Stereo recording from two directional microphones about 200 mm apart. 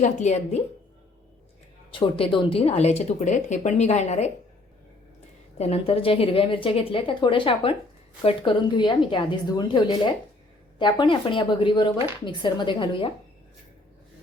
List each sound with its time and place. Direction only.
0.0 s speech: 35° left (ahead or behind)
1.9 s speech: 25° left (ahead or behind)
5.5 s a woman's voice: 30° left (ahead or behind)